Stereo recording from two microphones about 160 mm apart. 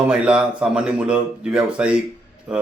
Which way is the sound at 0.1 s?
5° right (ahead or behind).